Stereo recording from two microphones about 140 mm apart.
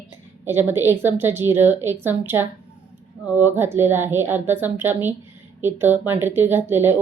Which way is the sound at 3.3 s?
15° right (ahead or behind).